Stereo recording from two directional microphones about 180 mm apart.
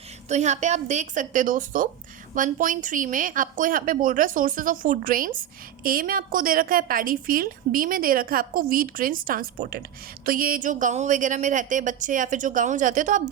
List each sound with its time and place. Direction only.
0.3 s a woman's voice: 40° right (ahead or behind)